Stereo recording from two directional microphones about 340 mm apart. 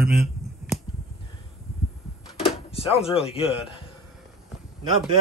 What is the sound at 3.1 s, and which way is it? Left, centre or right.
Speech, centre.